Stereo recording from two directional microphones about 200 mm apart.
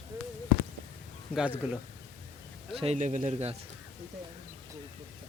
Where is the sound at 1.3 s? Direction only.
5° right (ahead or behind).